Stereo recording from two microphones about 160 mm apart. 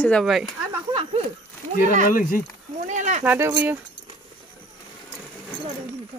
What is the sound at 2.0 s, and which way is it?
Speech, 60° left (ahead or behind).